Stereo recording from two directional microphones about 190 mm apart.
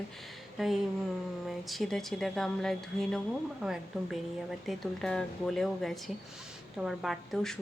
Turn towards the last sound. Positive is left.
turn(degrees=0)  # may be behind; listen again after turning